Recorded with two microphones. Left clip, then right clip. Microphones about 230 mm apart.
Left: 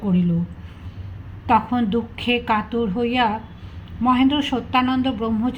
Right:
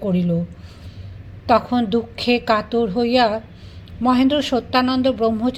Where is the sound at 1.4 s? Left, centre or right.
Right.